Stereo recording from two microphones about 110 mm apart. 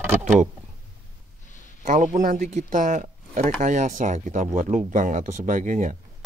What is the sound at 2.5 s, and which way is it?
Speech, 90° right.